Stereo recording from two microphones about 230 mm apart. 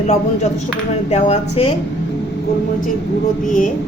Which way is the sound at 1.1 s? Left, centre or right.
Left.